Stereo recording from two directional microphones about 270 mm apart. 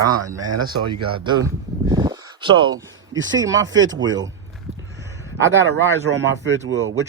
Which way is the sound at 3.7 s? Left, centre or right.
Right.